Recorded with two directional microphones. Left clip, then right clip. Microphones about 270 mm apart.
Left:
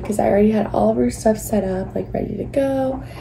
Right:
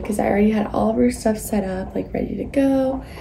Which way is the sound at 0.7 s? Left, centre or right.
Right.